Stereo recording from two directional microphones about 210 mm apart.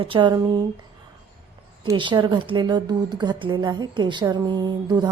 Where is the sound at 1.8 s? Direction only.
20° right (ahead or behind).